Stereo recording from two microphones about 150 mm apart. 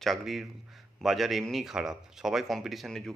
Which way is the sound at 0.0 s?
Centre (ahead or behind).